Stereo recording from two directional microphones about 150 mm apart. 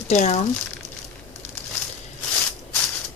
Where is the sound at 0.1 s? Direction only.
50° left (ahead or behind).